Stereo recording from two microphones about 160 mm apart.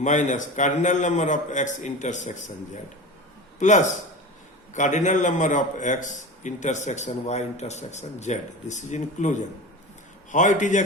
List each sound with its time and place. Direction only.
0.0 s a man's voice: 50° left (ahead or behind)
3.6 s a man's voice: 50° left (ahead or behind)